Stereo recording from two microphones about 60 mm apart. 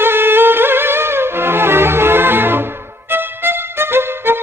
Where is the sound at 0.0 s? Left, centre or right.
Right.